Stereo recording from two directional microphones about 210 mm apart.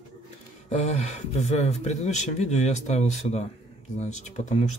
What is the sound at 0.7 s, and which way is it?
Speech, 35° left (ahead or behind).